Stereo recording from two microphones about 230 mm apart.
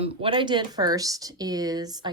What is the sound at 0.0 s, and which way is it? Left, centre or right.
Speech, right.